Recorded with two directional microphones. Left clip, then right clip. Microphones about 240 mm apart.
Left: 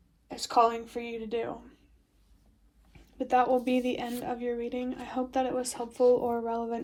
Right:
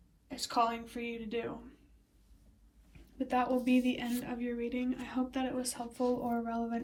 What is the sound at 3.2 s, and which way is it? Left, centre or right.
A woman's voice, left.